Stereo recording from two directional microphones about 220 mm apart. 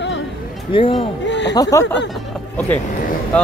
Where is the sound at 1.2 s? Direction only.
55° left (ahead or behind).